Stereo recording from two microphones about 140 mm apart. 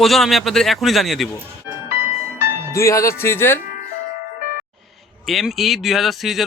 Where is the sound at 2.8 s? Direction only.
20° left (ahead or behind).